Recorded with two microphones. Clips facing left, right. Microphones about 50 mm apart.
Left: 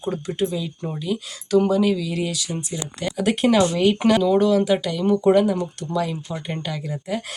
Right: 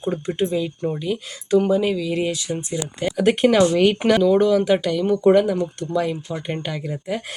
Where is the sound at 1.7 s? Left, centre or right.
Right.